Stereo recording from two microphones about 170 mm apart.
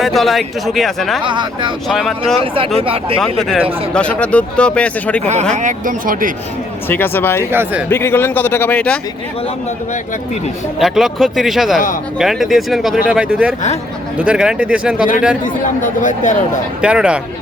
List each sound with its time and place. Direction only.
0.0 s speech: centre (ahead or behind)
1.2 s speech: 25° right (ahead or behind)
1.9 s speech: centre (ahead or behind)
2.4 s speech: 35° right (ahead or behind)
3.2 s speech: centre (ahead or behind)
5.2 s speech: 40° right (ahead or behind)
6.8 s speech: 10° left (ahead or behind)
7.5 s speech: 10° right (ahead or behind)
7.9 s speech: 15° left (ahead or behind)
10.8 s speech: centre (ahead or behind)
15.4 s speech: 50° left (ahead or behind)
16.8 s speech: 5° right (ahead or behind)